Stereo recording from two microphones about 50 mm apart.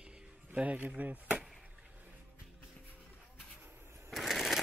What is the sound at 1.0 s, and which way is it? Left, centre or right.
Chop, right.